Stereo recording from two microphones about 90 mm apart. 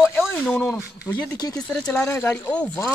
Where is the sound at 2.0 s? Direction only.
25° left (ahead or behind).